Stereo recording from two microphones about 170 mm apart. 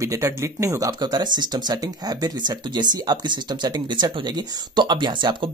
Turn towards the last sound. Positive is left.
turn(degrees=-25)  # may be behind; listen again after turning